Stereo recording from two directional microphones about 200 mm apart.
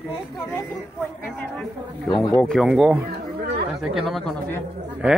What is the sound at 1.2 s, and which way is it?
Speech, 10° left (ahead or behind).